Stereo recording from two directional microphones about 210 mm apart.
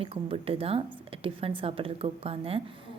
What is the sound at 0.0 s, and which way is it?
A woman's voice, 25° right (ahead or behind).